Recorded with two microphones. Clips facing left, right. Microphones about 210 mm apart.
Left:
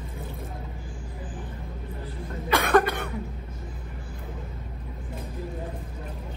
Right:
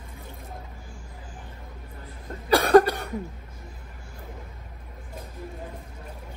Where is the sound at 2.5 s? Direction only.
35° right (ahead or behind).